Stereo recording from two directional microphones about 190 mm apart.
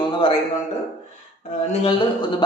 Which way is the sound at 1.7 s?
25° left (ahead or behind).